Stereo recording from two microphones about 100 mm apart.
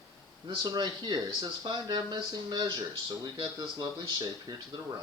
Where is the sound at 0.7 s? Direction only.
45° right (ahead or behind).